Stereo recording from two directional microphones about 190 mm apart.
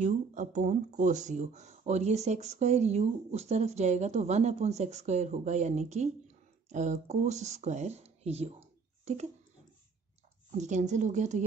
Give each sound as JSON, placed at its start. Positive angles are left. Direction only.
{"t": 0.0, "sound": "speech", "side_deg": -40}
{"t": 10.6, "sound": "speech", "side_deg": -40}